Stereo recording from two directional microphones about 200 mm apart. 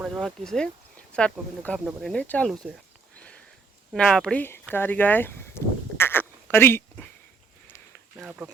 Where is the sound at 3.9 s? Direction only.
5° left (ahead or behind).